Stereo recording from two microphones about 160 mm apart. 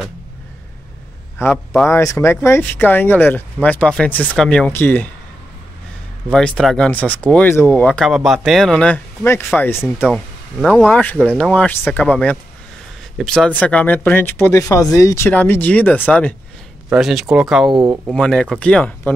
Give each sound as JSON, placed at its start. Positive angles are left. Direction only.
{"t": 1.4, "sound": "speech", "side_deg": 15}
{"t": 6.3, "sound": "speech", "side_deg": 5}
{"t": 9.2, "sound": "speech", "side_deg": 15}
{"t": 10.0, "sound": "speech", "side_deg": 5}
{"t": 17.6, "sound": "speech", "side_deg": -25}
{"t": 18.0, "sound": "speech", "side_deg": 5}